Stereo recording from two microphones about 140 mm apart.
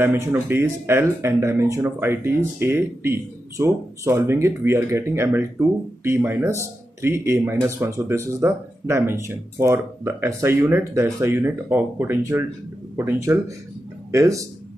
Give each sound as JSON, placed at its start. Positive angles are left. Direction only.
{"t": 0.0, "sound": "speech", "side_deg": -15}